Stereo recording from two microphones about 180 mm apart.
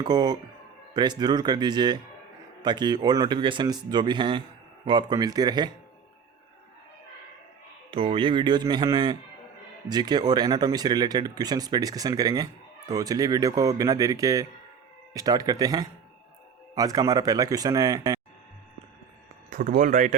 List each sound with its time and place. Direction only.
0.0 s speech: 20° right (ahead or behind)
7.9 s speech: 30° right (ahead or behind)
19.5 s speech: 50° right (ahead or behind)